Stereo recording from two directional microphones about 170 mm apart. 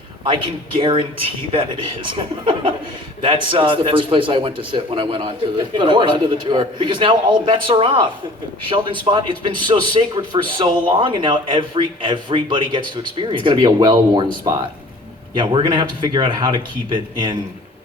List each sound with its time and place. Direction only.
0.3 s a man's voice: 30° right (ahead or behind)
15.4 s a man's voice: 30° right (ahead or behind)